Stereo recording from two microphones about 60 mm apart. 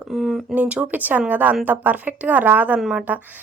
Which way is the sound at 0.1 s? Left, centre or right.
Centre.